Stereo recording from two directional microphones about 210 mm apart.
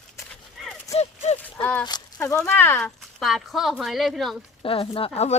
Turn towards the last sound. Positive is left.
turn(degrees=25)  # may be behind; listen again after turning